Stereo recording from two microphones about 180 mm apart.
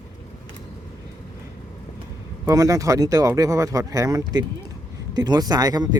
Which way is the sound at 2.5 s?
20° right (ahead or behind).